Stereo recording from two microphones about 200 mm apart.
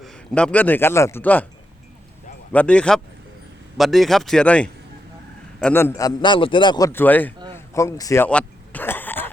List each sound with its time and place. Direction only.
0.0 s a man's voice: centre (ahead or behind)
2.5 s speech: 5° left (ahead or behind)
5.7 s a man's voice: 10° left (ahead or behind)
7.5 s throat clearing: 15° left (ahead or behind)